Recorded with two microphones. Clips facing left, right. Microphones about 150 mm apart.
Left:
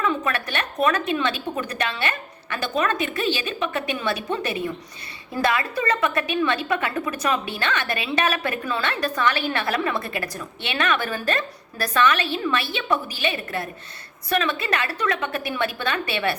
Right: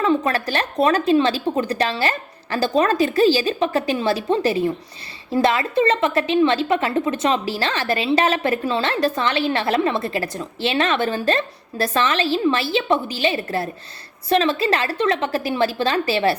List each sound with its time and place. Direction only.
0.0 s a woman's voice: 30° right (ahead or behind)